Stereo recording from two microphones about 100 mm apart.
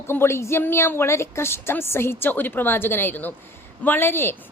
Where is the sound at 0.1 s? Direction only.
25° left (ahead or behind).